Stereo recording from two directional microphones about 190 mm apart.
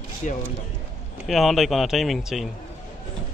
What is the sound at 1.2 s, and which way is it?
Speech, centre (ahead or behind).